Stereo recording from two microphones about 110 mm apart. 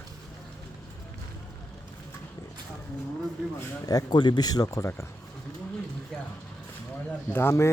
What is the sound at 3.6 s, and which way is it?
Speech, 35° left (ahead or behind).